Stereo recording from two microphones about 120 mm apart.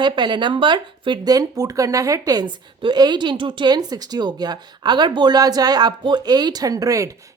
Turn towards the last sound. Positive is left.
turn(degrees=-30)  # may be behind; listen again after turning